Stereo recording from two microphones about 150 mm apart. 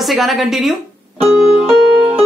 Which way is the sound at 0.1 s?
Centre (ahead or behind).